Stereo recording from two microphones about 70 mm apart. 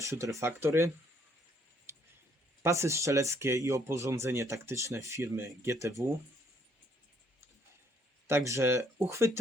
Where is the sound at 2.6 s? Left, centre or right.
Right.